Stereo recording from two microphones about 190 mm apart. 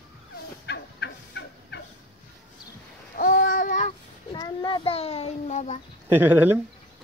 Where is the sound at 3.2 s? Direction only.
50° left (ahead or behind).